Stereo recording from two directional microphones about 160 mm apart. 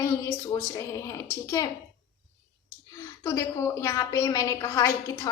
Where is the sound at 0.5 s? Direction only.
20° left (ahead or behind).